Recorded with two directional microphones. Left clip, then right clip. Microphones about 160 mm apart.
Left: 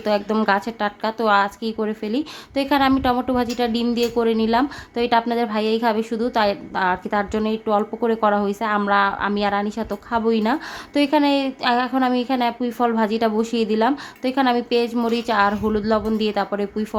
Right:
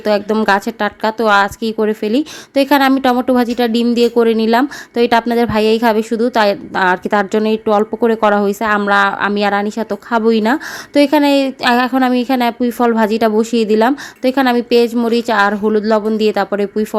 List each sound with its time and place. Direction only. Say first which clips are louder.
0.0 s speech: right 6 dB; 30° right (ahead or behind)